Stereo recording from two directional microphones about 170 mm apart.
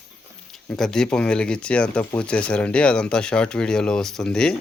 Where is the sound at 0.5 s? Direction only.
5° left (ahead or behind).